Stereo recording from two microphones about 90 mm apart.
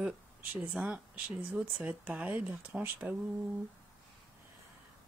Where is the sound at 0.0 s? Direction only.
5° right (ahead or behind).